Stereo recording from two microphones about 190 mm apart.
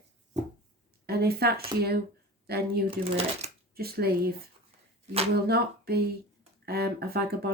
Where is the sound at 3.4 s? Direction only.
35° right (ahead or behind).